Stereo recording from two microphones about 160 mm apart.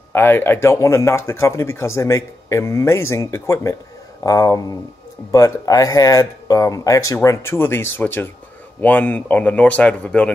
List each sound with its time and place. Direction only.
0.1 s speech: 15° left (ahead or behind)